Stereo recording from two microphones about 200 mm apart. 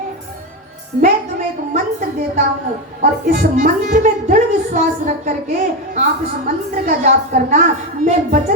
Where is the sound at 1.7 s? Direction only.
35° right (ahead or behind).